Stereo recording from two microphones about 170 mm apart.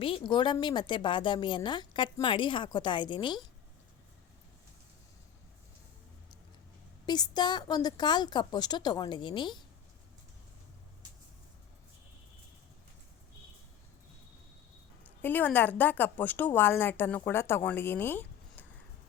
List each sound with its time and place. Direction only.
0.0 s a woman's voice: 30° left (ahead or behind)
7.0 s a woman's voice: 25° left (ahead or behind)
15.0 s a woman's voice: 10° left (ahead or behind)